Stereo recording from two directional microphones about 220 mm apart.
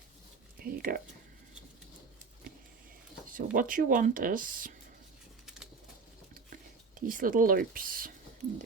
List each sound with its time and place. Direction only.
0.6 s a sound: 40° right (ahead or behind)
3.3 s speech: 40° right (ahead or behind)
7.1 s speech: 40° right (ahead or behind)